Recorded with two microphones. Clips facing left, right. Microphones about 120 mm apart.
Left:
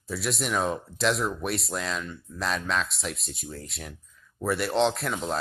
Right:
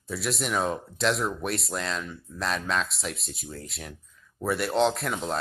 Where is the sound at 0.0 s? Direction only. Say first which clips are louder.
Even; centre (ahead or behind).